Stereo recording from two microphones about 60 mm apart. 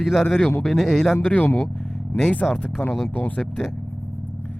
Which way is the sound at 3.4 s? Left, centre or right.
Centre.